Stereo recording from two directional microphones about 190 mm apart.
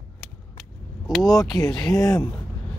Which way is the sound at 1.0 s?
Centre (ahead or behind).